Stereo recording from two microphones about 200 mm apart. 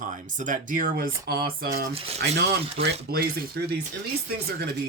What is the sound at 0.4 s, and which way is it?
Speech, 45° right (ahead or behind).